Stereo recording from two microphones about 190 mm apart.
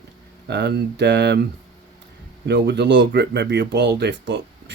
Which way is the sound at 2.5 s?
65° right (ahead or behind).